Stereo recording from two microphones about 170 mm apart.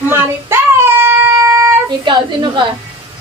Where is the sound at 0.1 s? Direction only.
15° right (ahead or behind).